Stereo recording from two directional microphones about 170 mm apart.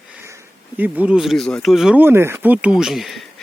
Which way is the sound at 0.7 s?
10° right (ahead or behind).